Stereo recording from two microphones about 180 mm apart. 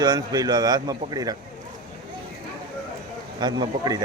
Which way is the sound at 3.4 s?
25° right (ahead or behind).